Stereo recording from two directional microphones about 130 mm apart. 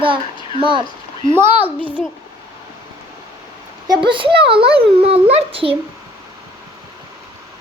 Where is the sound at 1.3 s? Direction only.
15° right (ahead or behind).